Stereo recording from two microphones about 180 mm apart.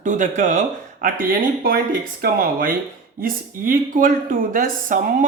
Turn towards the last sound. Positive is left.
turn(degrees=-45)  # may be behind; listen again after turning